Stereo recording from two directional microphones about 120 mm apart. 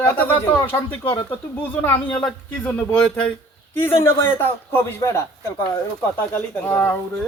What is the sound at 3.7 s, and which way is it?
A man's voice, 20° left (ahead or behind).